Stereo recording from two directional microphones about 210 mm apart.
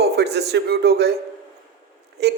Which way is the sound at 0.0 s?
50° right (ahead or behind).